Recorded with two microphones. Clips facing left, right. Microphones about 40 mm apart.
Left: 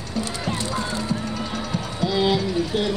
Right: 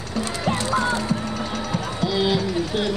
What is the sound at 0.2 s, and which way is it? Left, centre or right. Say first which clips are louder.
Music: right 3 dB; right.